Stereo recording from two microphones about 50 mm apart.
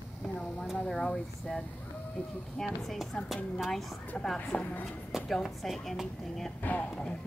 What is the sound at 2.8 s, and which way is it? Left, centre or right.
Speech, centre.